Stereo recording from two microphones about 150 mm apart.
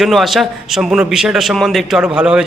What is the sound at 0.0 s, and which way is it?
A man's voice, centre (ahead or behind).